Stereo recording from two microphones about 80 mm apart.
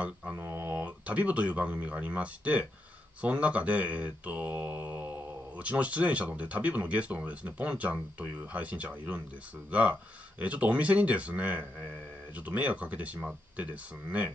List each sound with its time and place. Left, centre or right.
0.0 s speech: centre